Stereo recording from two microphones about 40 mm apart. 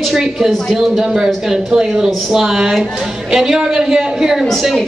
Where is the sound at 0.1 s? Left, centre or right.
Centre.